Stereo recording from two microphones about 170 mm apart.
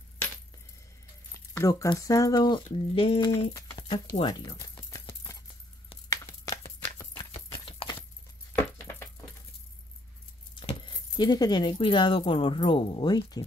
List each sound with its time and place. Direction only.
1.3 s speech: 20° left (ahead or behind)
3.5 s a sound: 25° left (ahead or behind)
4.2 s keys jangling: 25° left (ahead or behind)
6.0 s chopping: 20° left (ahead or behind)
7.3 s clip-clop: 30° left (ahead or behind)
8.5 s a sound: 15° left (ahead or behind)
10.5 s speech: 30° left (ahead or behind)